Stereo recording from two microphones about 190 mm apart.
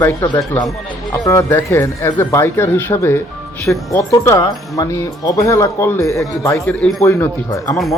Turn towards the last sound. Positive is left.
turn(degrees=15)  # may be behind; listen again after turning